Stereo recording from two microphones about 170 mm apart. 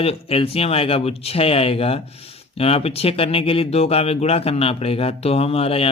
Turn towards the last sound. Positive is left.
turn(degrees=35)  # may be behind; listen again after turning